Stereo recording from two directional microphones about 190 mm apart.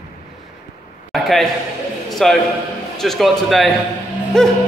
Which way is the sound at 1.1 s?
Centre (ahead or behind).